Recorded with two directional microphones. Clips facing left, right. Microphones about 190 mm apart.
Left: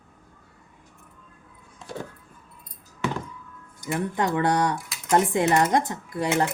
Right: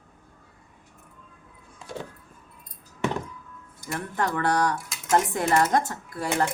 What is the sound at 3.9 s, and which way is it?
Speech, 15° left (ahead or behind).